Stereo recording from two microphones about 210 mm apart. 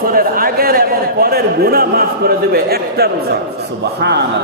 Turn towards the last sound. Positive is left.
turn(degrees=-50)  # may be behind; listen again after turning